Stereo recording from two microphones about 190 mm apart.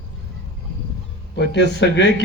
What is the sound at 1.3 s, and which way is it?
Speech, 65° left (ahead or behind).